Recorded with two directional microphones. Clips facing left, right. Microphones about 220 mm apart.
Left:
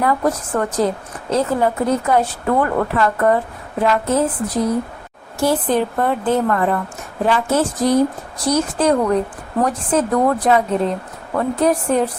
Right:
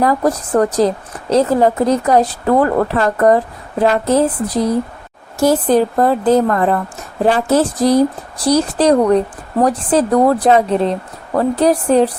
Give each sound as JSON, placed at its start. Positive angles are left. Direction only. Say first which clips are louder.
{"t": 0.0, "sound": "a woman's voice", "louder": "right 3 dB", "side_deg": -35}